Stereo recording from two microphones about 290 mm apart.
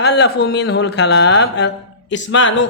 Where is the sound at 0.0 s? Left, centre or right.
Left.